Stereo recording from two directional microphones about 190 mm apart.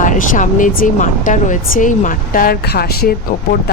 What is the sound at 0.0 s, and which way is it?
A woman's voice, 45° left (ahead or behind).